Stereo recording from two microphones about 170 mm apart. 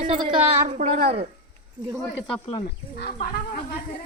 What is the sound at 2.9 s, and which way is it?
Speech, 65° left (ahead or behind).